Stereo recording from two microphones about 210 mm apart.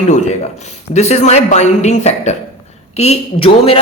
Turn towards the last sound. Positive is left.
turn(degrees=30)  # may be behind; listen again after turning